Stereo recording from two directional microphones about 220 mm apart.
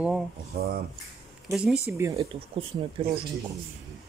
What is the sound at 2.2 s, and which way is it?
Speech, 25° right (ahead or behind).